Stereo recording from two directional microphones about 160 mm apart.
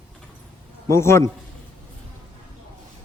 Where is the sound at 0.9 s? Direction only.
15° left (ahead or behind).